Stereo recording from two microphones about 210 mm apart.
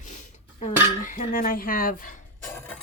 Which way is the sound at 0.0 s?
35° left (ahead or behind).